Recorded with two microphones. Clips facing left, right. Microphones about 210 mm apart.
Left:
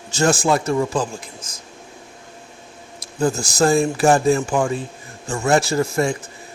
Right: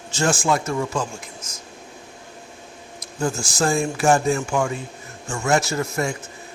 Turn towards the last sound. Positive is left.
turn(degrees=30)  # may be behind; listen again after turning